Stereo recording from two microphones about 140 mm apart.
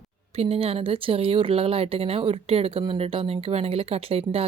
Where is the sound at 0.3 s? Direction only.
45° right (ahead or behind).